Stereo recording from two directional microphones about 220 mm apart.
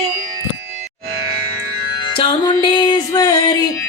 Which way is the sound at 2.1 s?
20° left (ahead or behind).